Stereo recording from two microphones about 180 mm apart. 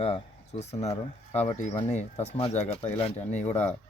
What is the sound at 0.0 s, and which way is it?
Speech, 35° left (ahead or behind).